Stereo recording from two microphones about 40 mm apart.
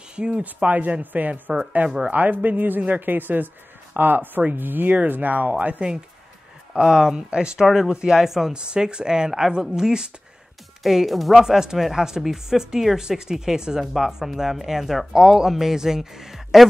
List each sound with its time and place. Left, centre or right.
0.1 s speech: right
0.4 s a man's voice: right
6.7 s speech: centre
7.5 s speech: centre
8.5 s speech: right
10.8 s speech: centre
11.4 s speech: centre